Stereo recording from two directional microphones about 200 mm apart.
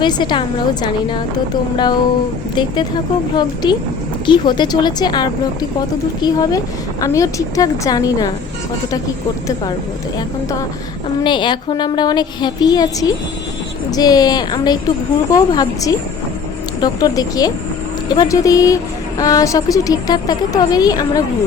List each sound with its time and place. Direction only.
0.0 s a woman's voice: 20° left (ahead or behind)
3.3 s a woman's voice: 20° left (ahead or behind)
11.2 s a woman's voice: 25° left (ahead or behind)